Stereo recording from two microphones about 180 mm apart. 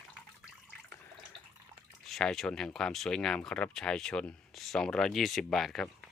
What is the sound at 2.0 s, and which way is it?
Speech, centre (ahead or behind).